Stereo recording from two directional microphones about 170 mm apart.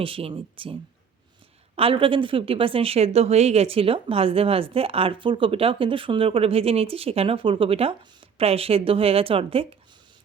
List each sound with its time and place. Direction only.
0.0 s a woman's voice: 30° right (ahead or behind)